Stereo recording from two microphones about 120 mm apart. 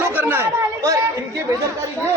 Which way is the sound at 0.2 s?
15° right (ahead or behind).